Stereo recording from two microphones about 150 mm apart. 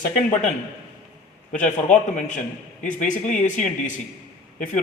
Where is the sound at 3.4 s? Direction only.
55° left (ahead or behind).